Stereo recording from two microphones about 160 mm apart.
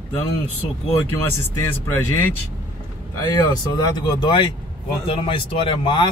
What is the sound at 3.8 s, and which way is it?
Speech, 25° left (ahead or behind).